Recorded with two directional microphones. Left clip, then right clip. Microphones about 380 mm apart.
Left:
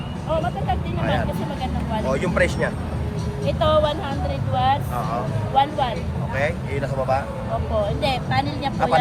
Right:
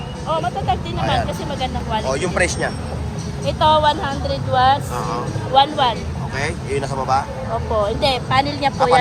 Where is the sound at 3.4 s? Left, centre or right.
Right.